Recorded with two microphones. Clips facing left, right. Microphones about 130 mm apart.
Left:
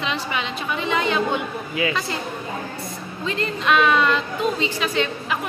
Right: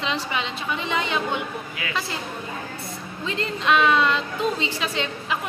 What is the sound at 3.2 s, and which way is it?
A woman's voice, 20° right (ahead or behind).